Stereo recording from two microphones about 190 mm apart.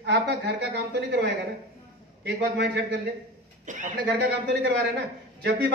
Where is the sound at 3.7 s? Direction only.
40° right (ahead or behind).